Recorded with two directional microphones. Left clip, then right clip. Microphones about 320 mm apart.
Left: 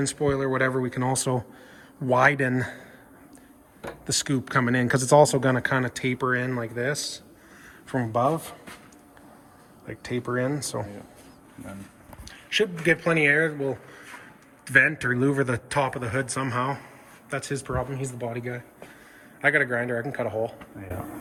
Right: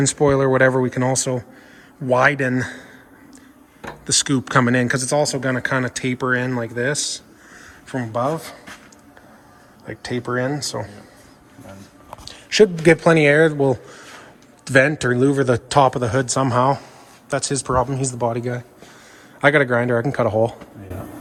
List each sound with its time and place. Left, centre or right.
0.0 s a man's voice: centre
4.0 s speech: centre
7.9 s speech: centre
9.8 s speech: centre
12.2 s speech: centre
14.6 s a man's voice: centre
19.5 s a man's voice: right